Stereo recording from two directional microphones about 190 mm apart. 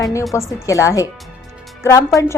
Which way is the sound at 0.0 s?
15° left (ahead or behind).